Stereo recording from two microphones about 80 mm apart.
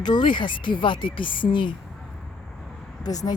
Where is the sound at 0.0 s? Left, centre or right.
Left.